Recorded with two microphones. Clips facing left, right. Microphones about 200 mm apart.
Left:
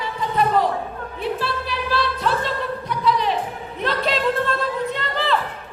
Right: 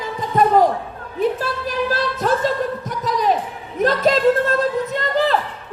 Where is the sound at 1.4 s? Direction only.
45° right (ahead or behind).